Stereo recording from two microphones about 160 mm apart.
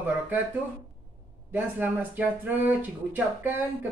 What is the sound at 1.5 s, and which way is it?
Speech, 10° right (ahead or behind).